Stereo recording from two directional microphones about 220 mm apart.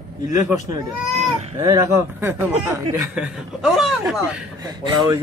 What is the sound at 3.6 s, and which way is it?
Speech, centre (ahead or behind).